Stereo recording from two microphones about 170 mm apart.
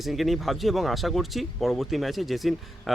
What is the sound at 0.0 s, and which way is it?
Speech, centre (ahead or behind).